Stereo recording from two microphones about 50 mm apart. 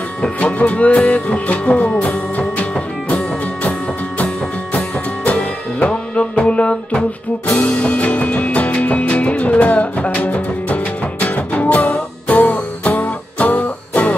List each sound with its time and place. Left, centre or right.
0.2 s music: left
4.7 s music: left